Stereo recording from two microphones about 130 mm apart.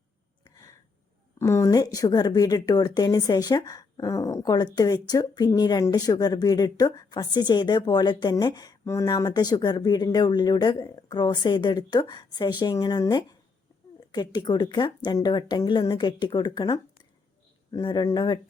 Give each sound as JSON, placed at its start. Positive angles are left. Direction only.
{"t": 1.4, "sound": "speech", "side_deg": 25}